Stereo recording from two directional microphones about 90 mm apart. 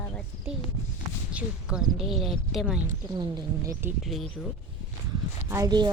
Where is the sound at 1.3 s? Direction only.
10° right (ahead or behind).